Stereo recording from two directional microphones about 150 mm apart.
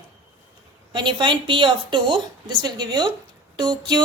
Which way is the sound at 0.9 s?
30° right (ahead or behind).